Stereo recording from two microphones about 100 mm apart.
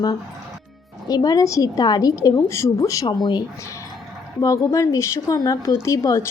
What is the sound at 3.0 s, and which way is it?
Speech, 50° left (ahead or behind).